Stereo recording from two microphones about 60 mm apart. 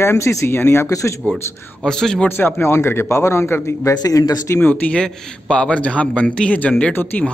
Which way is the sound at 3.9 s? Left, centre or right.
Left.